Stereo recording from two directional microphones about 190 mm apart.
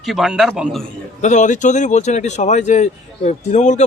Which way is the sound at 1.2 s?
40° left (ahead or behind).